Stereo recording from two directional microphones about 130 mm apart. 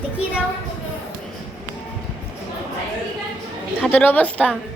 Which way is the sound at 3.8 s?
10° left (ahead or behind).